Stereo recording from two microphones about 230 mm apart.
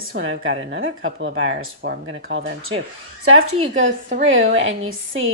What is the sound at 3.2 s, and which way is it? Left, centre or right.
Speech, right.